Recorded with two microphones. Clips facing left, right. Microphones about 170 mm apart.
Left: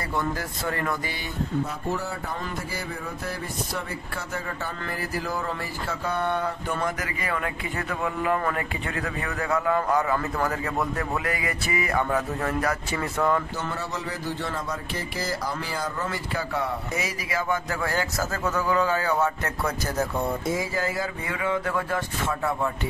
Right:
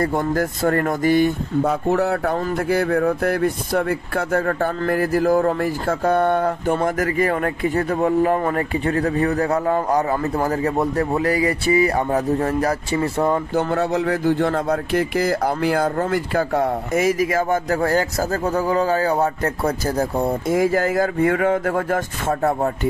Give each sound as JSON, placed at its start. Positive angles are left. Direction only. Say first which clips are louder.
{"t": 0.0, "sound": "speech", "louder": "right 9 dB", "side_deg": -50}
{"t": 1.6, "sound": "speech", "louder": "right 15 dB", "side_deg": -65}
{"t": 13.6, "sound": "speech", "louder": "right 12 dB", "side_deg": -60}
{"t": 20.5, "sound": "speech", "louder": "right 10 dB", "side_deg": -50}